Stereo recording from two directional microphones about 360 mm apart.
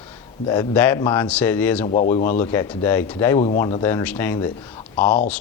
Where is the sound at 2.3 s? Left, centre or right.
Centre.